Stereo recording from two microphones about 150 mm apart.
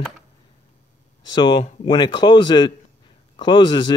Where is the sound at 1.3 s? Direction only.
30° left (ahead or behind).